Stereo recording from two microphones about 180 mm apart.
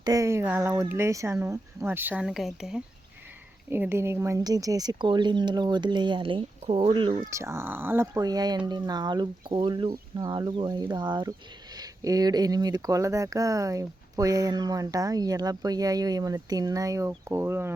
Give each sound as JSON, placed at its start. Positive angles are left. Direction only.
{"t": 0.0, "sound": "speech", "side_deg": -20}
{"t": 3.7, "sound": "speech", "side_deg": -10}
{"t": 7.2, "sound": "speech", "side_deg": -15}